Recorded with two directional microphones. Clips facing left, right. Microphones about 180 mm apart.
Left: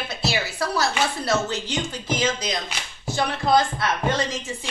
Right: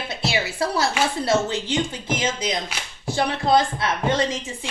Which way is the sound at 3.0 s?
30° right (ahead or behind).